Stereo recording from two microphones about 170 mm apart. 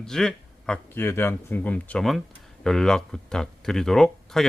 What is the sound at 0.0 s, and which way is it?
Speech, 5° left (ahead or behind).